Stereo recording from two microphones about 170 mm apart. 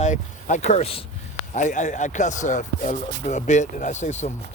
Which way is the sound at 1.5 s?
45° left (ahead or behind).